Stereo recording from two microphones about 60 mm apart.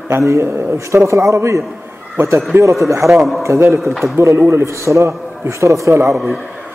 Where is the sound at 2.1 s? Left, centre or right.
Right.